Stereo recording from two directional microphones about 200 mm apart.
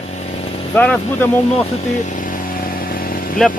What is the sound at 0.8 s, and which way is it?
Speech, 5° left (ahead or behind).